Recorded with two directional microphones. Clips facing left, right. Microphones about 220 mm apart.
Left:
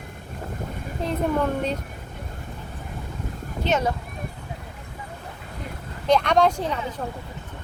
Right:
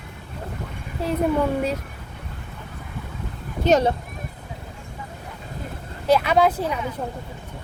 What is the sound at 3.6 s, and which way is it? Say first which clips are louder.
Speech: right 6 dB; 35° right (ahead or behind).